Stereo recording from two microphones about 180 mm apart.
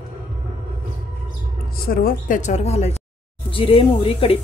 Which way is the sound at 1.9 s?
50° left (ahead or behind).